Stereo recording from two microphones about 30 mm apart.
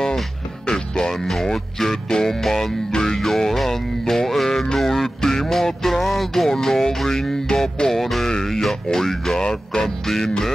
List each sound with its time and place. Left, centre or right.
1.0 s speech: centre
2.2 s music: centre
2.9 s music: left
3.2 s music: centre
6.5 s music: centre
8.4 s a sound: centre
8.6 s music: centre
9.4 s music: left
10.0 s music: centre